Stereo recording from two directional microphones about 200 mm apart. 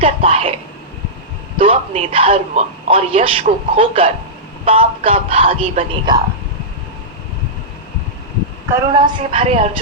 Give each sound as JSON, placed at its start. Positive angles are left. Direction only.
{"t": 0.0, "sound": "a man's voice", "side_deg": -30}
{"t": 1.5, "sound": "a man's voice", "side_deg": -30}
{"t": 8.7, "sound": "a man's voice", "side_deg": -25}